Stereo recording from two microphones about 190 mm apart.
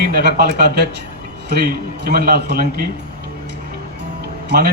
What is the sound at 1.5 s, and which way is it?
A man's voice, 55° right (ahead or behind).